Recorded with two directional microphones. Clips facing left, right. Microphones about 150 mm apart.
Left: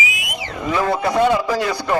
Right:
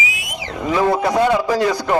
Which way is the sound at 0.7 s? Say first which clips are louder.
Right 2 dB; 15° right (ahead or behind).